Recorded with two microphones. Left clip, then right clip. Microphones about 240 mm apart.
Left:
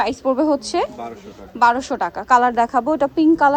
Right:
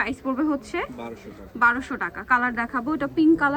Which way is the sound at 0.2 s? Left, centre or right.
Centre.